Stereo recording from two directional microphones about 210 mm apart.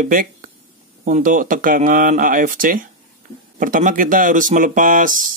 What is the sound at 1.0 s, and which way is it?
Mantra, 40° right (ahead or behind).